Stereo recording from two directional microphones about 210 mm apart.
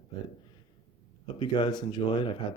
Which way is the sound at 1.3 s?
20° left (ahead or behind).